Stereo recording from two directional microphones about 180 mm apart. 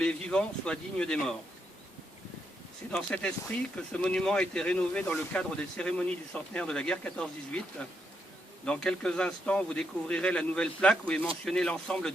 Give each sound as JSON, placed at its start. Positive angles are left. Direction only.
{"t": 0.0, "sound": "speech", "side_deg": 5}
{"t": 2.9, "sound": "speech", "side_deg": 5}
{"t": 8.6, "sound": "speech", "side_deg": 5}